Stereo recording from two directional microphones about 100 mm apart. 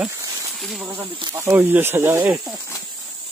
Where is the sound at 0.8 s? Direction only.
20° right (ahead or behind).